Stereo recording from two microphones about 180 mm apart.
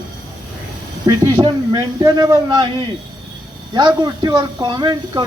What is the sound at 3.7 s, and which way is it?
A man's voice, 25° right (ahead or behind).